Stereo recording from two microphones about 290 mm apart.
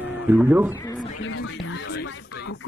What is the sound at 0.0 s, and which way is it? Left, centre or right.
Speech, centre.